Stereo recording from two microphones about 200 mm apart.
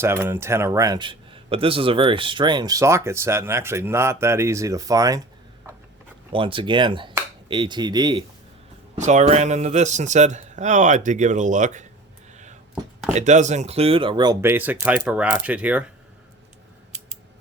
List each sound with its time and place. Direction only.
0.0 s a man's voice: 10° right (ahead or behind)
6.3 s speech: 25° right (ahead or behind)
9.0 s speech: 35° right (ahead or behind)
13.1 s a man's voice: 35° right (ahead or behind); by 15.8 s 5° right (ahead or behind)